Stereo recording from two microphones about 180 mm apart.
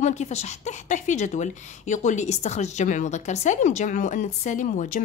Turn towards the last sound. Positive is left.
turn(degrees=45)  # may be behind; listen again after turning